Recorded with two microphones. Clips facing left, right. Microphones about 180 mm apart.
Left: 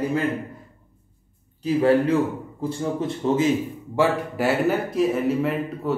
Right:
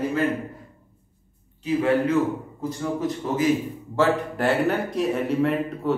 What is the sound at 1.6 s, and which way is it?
A man's voice, 35° left (ahead or behind).